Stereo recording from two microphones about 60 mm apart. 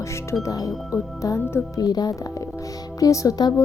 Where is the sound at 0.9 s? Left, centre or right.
Left.